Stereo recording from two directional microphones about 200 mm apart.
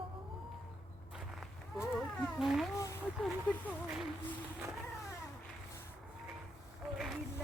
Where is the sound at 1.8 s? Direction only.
Centre (ahead or behind).